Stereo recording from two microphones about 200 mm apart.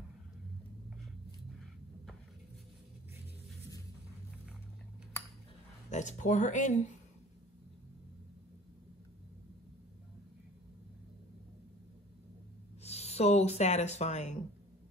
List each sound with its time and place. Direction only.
5.9 s speech: 35° left (ahead or behind)
12.8 s speech: 35° left (ahead or behind)